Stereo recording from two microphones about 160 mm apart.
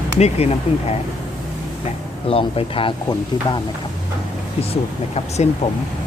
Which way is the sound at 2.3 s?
35° left (ahead or behind).